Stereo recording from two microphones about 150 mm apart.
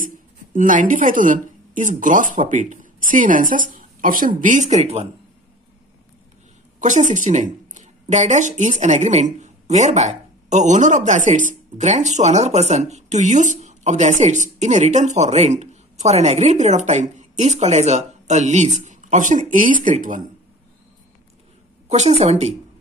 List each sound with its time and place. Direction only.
0.0 s speech: 60° right (ahead or behind); by 5.0 s 45° right (ahead or behind)
6.8 s speech: 55° right (ahead or behind)
21.8 s speech: 45° right (ahead or behind)